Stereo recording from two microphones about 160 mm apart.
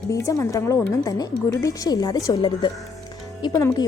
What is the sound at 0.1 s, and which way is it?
Speech, 20° left (ahead or behind).